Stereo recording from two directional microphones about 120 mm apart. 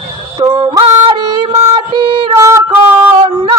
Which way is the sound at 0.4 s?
40° right (ahead or behind).